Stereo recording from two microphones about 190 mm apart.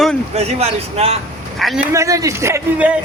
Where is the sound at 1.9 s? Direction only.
15° right (ahead or behind).